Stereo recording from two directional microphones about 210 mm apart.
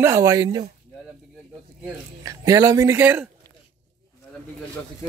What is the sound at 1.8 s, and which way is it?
Speech, 15° right (ahead or behind).